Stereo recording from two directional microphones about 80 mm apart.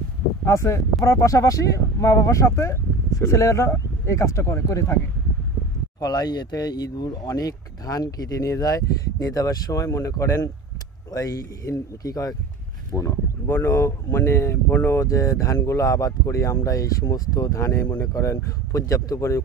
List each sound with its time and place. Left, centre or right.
0.5 s speech: left
5.9 s speech: left
12.9 s speech: left
13.5 s speech: left
17.8 s speech: left
18.1 s speech: left